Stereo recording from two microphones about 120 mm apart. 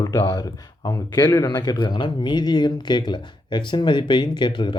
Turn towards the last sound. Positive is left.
turn(degrees=40)  # may be behind; listen again after turning